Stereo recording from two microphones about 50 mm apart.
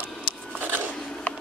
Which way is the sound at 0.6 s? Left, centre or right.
Right.